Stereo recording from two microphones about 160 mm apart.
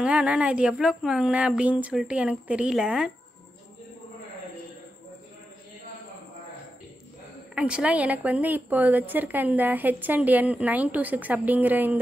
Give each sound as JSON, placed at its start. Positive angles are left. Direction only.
{"t": 0.0, "sound": "a woman's voice", "side_deg": -5}
{"t": 7.5, "sound": "a woman's voice", "side_deg": -5}